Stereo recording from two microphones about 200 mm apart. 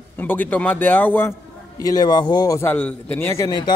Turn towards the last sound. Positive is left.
turn(degrees=20)  # may be behind; listen again after turning